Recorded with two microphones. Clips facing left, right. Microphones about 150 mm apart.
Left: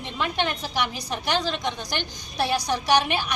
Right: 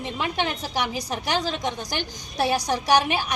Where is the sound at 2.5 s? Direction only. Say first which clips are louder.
Even; 45° right (ahead or behind).